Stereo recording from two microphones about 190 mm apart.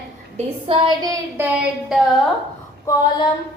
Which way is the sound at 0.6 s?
25° right (ahead or behind).